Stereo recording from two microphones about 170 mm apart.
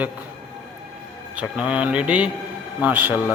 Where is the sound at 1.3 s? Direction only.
5° right (ahead or behind).